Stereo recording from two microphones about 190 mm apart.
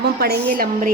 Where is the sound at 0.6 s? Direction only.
45° right (ahead or behind).